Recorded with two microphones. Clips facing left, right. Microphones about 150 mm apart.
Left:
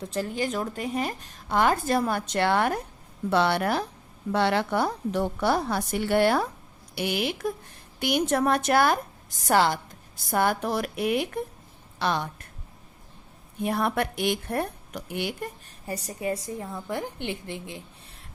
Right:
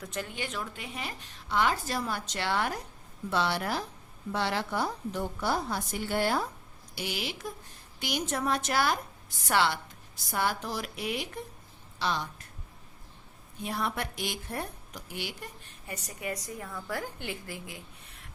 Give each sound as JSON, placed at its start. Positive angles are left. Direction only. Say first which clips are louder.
{"t": 0.0, "sound": "a woman's voice", "louder": "left 8 dB", "side_deg": 35}
{"t": 9.5, "sound": "a woman's voice", "louder": "left 5 dB", "side_deg": 45}
{"t": 10.2, "sound": "a woman's voice", "louder": "left 7 dB", "side_deg": 55}
{"t": 13.6, "sound": "a woman's voice", "louder": "left 7 dB", "side_deg": 55}
{"t": 15.9, "sound": "a woman's voice", "louder": "left 7 dB", "side_deg": 30}